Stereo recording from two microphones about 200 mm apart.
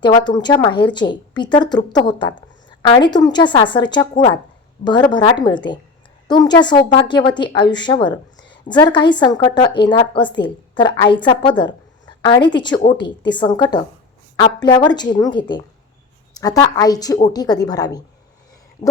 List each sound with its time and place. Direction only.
0.0 s a woman's voice: 20° left (ahead or behind)